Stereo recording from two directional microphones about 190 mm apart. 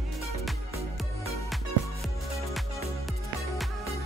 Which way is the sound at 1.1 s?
15° left (ahead or behind).